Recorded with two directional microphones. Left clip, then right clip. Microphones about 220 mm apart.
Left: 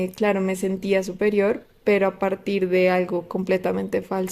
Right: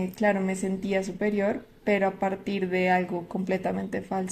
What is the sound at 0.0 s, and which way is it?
Speech, 45° left (ahead or behind).